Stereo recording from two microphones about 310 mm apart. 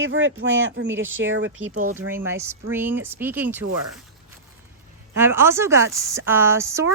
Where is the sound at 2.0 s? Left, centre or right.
Centre.